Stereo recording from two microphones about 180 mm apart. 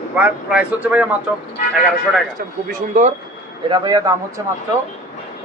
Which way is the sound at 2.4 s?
45° right (ahead or behind).